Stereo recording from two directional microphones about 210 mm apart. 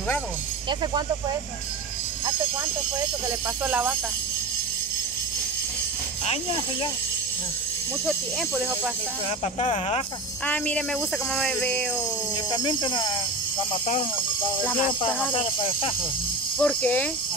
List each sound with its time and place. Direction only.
3.6 s speech: 5° right (ahead or behind)
6.2 s speech: 25° left (ahead or behind)
9.6 s speech: 30° left (ahead or behind)
10.4 s speech: 5° left (ahead or behind)
12.4 s speech: 20° left (ahead or behind)
14.6 s speech: 5° left (ahead or behind)
15.3 s speech: 25° left (ahead or behind)
16.5 s speech: 5° left (ahead or behind)